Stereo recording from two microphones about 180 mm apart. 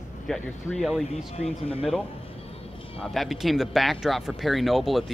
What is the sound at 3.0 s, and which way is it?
Speech, centre (ahead or behind).